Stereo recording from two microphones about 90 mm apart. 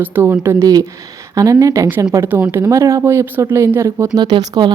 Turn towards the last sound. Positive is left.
turn(degrees=-55)  # may be behind; listen again after turning